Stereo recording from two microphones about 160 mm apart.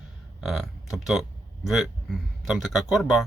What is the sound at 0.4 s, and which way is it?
Speech, centre (ahead or behind).